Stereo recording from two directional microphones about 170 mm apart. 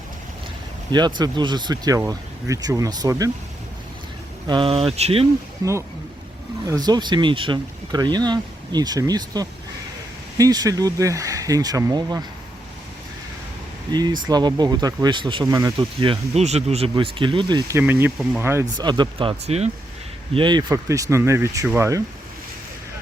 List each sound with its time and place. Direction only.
0.9 s speech: 25° right (ahead or behind)
4.4 s speech: 30° right (ahead or behind)
5.6 s speech: 20° right (ahead or behind)
13.9 s speech: 25° right (ahead or behind)
17.7 s speech: 15° right (ahead or behind)
19.5 s speech: 40° right (ahead or behind)
20.3 s speech: 25° right (ahead or behind)